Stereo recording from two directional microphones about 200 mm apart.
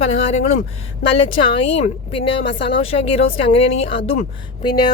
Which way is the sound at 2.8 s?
30° left (ahead or behind).